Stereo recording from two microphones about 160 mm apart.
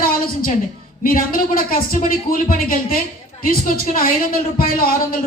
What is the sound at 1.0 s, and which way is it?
A man's voice, 60° left (ahead or behind).